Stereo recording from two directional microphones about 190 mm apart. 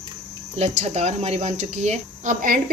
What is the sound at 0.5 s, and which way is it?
Speech, 35° right (ahead or behind).